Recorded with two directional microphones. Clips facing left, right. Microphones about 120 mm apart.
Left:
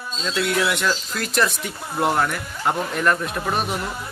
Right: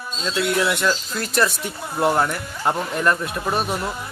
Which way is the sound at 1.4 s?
Centre (ahead or behind).